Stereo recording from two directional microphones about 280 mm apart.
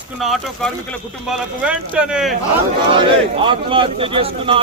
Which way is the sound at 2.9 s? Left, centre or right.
Centre.